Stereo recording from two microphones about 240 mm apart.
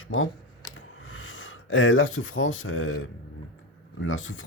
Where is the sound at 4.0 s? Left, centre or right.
Left.